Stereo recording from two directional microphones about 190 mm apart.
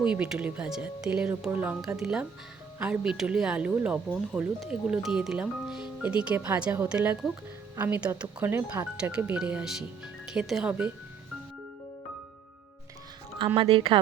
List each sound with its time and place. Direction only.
0.1 s speech: 5° right (ahead or behind)
13.6 s speech: 30° right (ahead or behind)